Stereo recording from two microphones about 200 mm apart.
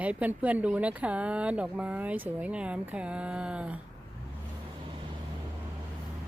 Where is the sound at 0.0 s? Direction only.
5° right (ahead or behind).